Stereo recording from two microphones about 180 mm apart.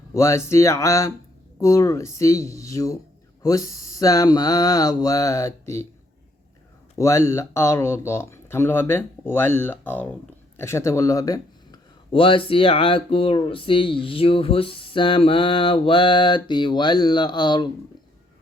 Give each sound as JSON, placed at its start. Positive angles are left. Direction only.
{"t": 0.1, "sound": "speech", "side_deg": 15}
{"t": 7.0, "sound": "speech", "side_deg": 15}